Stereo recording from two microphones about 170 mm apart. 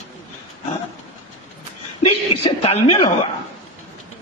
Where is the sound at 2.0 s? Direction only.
35° left (ahead or behind).